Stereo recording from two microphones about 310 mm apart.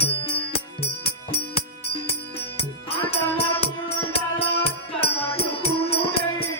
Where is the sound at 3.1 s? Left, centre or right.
Centre.